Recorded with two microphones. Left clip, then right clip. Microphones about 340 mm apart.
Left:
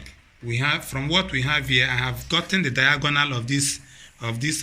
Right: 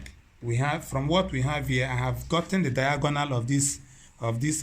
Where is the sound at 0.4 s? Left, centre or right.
Right.